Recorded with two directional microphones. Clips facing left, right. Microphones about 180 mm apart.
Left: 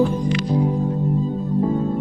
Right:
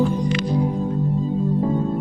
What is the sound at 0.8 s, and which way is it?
Music, centre (ahead or behind).